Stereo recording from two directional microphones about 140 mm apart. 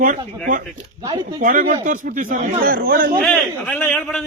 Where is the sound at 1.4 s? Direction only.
65° right (ahead or behind); by 3.1 s 90° right.